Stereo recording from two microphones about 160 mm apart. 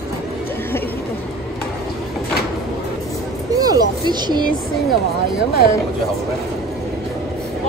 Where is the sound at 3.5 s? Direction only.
25° right (ahead or behind).